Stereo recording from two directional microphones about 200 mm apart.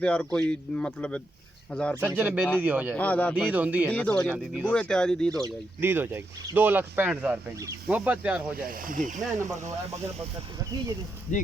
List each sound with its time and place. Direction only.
0.0 s speech: 5° left (ahead or behind)
2.0 s speech: 10° right (ahead or behind)
2.9 s speech: 5° left (ahead or behind)
3.3 s speech: 5° right (ahead or behind)
3.9 s speech: 5° left (ahead or behind)
5.3 s speech: 15° right (ahead or behind)
8.5 s speech: 45° right (ahead or behind)
11.3 s speech: 40° left (ahead or behind)